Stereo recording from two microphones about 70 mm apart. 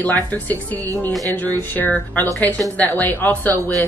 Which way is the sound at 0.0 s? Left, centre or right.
Left.